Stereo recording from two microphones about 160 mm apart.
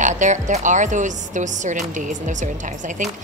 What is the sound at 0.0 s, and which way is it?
A woman's voice, 50° right (ahead or behind).